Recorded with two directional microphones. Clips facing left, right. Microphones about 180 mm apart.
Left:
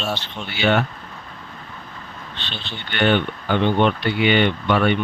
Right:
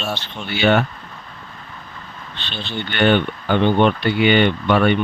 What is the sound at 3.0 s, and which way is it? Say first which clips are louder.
Speech: right 2 dB; 50° right (ahead or behind).